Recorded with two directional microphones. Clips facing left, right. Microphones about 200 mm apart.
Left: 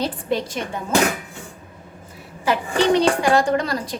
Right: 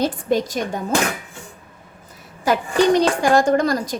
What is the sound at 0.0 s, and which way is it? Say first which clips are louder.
Speech: right 4 dB; 45° right (ahead or behind).